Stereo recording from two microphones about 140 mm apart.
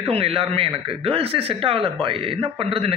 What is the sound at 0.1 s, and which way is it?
A man's voice, 40° right (ahead or behind).